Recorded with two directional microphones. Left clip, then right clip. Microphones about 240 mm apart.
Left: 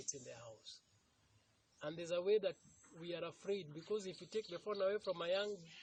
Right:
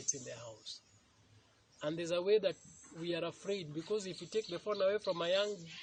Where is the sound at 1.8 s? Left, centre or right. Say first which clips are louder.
Right 5 dB; left.